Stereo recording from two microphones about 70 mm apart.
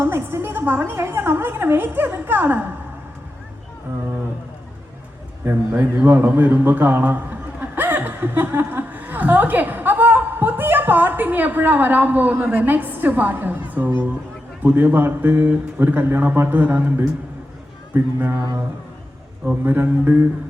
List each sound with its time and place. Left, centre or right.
0.0 s a woman's voice: right
5.5 s a man's voice: right
19.5 s speech: right